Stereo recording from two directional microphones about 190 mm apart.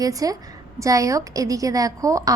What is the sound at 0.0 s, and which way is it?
A woman's voice, 20° right (ahead or behind).